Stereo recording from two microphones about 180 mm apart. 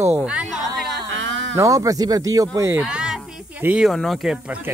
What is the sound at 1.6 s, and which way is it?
Speech, 20° right (ahead or behind).